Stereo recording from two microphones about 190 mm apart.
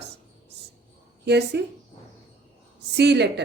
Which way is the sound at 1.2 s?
60° right (ahead or behind).